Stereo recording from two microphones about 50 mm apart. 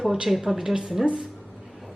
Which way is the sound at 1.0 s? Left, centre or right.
Right.